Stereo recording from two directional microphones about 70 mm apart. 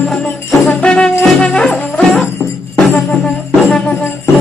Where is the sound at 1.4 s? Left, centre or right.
Centre.